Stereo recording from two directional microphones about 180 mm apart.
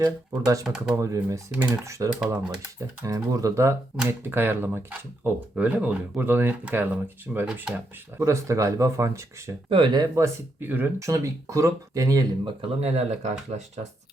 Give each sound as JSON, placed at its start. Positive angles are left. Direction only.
{"t": 0.0, "sound": "speech", "side_deg": -20}
{"t": 9.6, "sound": "speech", "side_deg": -30}
{"t": 12.6, "sound": "speech", "side_deg": -35}